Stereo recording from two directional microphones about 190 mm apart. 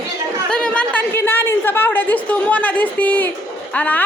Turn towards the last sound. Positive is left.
turn(degrees=10)  # may be behind; listen again after turning